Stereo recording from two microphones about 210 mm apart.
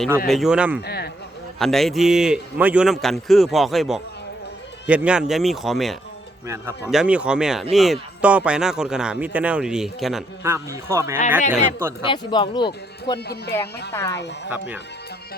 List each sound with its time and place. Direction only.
0.3 s a man's voice: centre (ahead or behind)
0.8 s a sound: 50° left (ahead or behind)
1.5 s a man's voice: centre (ahead or behind)
10.4 s speech: 10° right (ahead or behind)
12.0 s speech: 25° left (ahead or behind)
13.1 s speech: 50° left (ahead or behind)
13.9 s speech: 15° left (ahead or behind)